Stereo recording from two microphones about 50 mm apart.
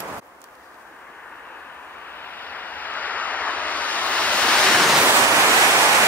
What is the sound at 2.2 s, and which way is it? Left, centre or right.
Vehicle, left.